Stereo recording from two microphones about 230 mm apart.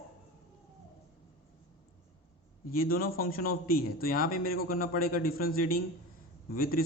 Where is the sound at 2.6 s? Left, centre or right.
Left.